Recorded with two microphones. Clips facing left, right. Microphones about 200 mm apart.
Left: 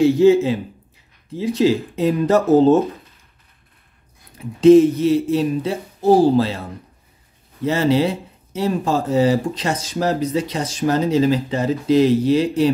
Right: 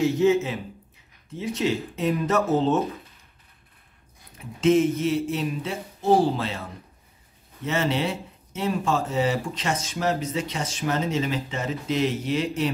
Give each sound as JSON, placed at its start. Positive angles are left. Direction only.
{"t": 0.0, "sound": "speech", "side_deg": 30}
{"t": 4.6, "sound": "speech", "side_deg": 35}
{"t": 7.6, "sound": "speech", "side_deg": 35}